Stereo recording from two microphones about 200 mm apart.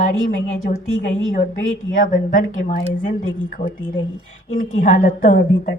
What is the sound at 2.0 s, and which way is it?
Speech, 40° left (ahead or behind).